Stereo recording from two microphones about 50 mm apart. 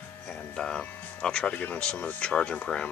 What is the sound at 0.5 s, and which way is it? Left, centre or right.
Speech, centre.